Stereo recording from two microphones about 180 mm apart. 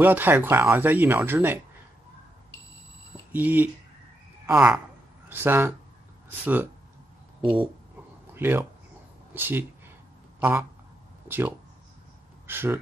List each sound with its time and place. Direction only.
0.0 s speech: 10° right (ahead or behind)
3.3 s speech: 10° right (ahead or behind)
7.4 s speech: 30° right (ahead or behind)
8.4 s speech: 10° right (ahead or behind)
9.3 s a sound: 10° right (ahead or behind)
11.2 s speech: 10° right (ahead or behind)